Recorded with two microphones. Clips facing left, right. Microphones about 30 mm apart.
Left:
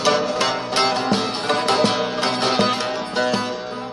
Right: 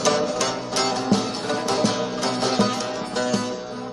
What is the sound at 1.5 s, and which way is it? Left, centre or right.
Sitar, left.